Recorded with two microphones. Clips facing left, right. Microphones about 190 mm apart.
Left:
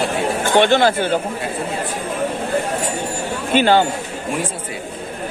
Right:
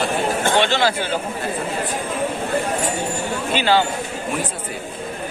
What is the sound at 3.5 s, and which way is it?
Speech, 50° left (ahead or behind).